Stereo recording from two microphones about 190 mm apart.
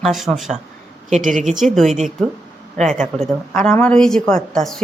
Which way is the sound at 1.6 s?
Centre (ahead or behind).